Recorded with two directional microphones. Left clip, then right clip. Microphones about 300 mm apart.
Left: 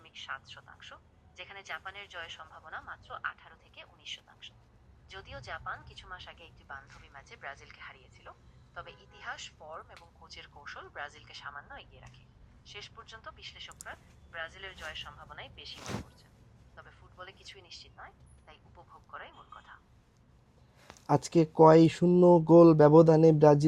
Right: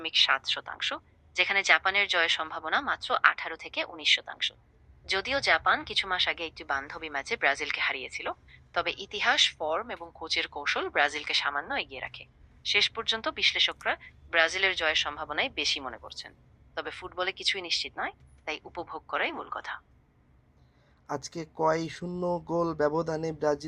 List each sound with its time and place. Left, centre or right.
0.0 s speech: right
21.1 s speech: left